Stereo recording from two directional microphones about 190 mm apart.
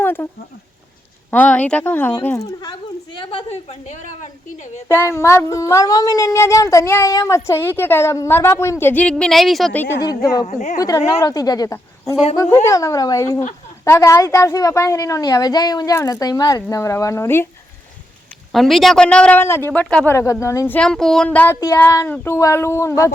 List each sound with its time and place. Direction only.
0.0 s a sound: 10° left (ahead or behind)
1.3 s speech: 10° left (ahead or behind)
2.6 s a woman's voice: 25° left (ahead or behind)
4.9 s a woman's voice: 15° left (ahead or behind)
10.0 s a woman's voice: 20° left (ahead or behind)
10.4 s a woman's voice: 40° left (ahead or behind)
10.8 s speech: 20° left (ahead or behind)
18.5 s speech: centre (ahead or behind)